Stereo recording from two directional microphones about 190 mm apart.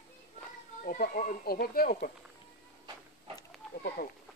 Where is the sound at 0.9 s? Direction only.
45° left (ahead or behind).